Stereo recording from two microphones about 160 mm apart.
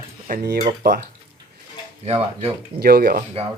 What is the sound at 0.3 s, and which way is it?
Speech, 75° right (ahead or behind).